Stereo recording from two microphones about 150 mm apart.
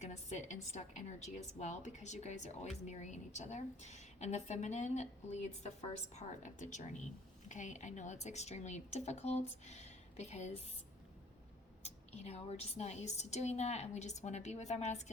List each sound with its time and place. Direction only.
0.0 s a woman's voice: 50° left (ahead or behind)
11.8 s a woman's voice: 45° left (ahead or behind)